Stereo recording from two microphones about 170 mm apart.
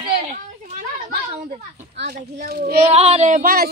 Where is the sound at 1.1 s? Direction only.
60° right (ahead or behind).